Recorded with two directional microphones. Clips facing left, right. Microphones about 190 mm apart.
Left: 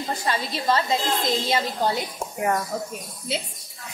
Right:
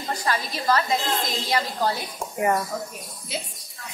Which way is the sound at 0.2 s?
25° left (ahead or behind).